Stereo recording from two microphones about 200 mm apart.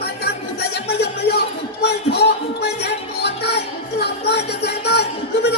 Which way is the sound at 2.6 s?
55° left (ahead or behind).